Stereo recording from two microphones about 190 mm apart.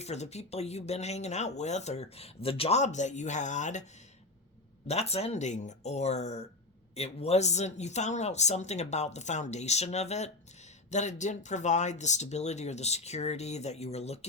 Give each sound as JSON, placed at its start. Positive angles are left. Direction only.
{"t": 0.0, "sound": "speech", "side_deg": 35}
{"t": 4.9, "sound": "speech", "side_deg": 35}